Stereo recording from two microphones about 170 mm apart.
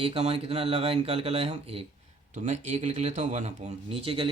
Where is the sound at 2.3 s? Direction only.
45° right (ahead or behind).